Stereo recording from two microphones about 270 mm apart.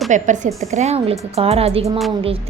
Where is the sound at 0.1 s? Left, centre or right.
Right.